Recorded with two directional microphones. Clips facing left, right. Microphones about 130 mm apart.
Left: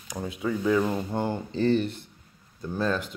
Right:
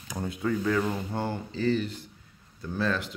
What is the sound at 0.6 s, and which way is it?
Speech, 15° left (ahead or behind).